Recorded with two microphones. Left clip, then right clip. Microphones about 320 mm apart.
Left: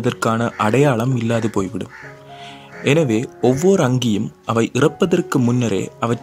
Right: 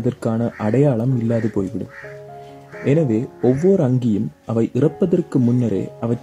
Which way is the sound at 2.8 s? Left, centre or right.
Left.